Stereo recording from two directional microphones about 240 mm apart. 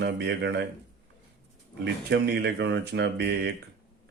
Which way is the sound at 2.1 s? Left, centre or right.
Right.